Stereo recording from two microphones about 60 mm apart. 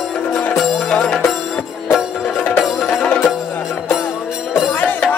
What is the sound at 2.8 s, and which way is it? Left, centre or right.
Music, centre.